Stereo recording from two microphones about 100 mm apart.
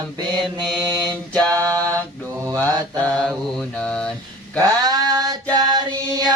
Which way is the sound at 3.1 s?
5° left (ahead or behind).